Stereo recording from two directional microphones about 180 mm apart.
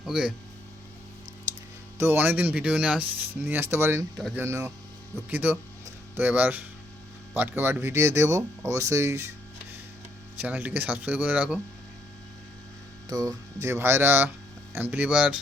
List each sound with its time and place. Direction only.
0.0 s speech: 5° right (ahead or behind)
2.0 s speech: 10° right (ahead or behind)
10.4 s speech: 10° right (ahead or behind)
13.1 s speech: 20° right (ahead or behind)